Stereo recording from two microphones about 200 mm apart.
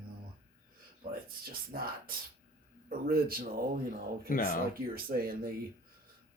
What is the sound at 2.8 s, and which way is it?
Speech, 45° right (ahead or behind).